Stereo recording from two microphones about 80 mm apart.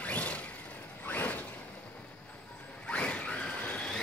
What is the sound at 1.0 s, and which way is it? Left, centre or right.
Mechanisms, left.